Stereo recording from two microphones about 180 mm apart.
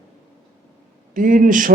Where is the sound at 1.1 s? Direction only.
50° right (ahead or behind).